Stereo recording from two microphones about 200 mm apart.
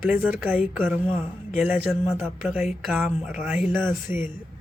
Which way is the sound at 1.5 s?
5° right (ahead or behind).